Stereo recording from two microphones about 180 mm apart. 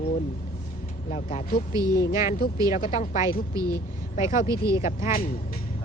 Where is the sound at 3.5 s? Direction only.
20° right (ahead or behind).